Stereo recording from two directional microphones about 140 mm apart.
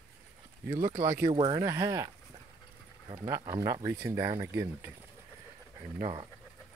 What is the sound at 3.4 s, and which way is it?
Speech, 25° right (ahead or behind).